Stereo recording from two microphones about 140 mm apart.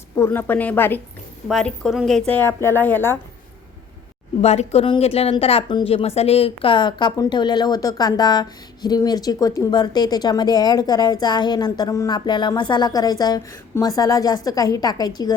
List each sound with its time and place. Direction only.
0.2 s a woman's voice: 15° left (ahead or behind)
4.4 s a woman's voice: 50° left (ahead or behind); by 15.4 s 25° left (ahead or behind)